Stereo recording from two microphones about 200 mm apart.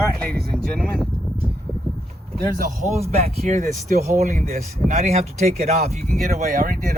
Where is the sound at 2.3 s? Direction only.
45° right (ahead or behind).